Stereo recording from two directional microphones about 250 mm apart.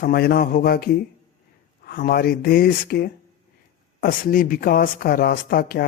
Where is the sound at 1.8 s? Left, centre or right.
Left.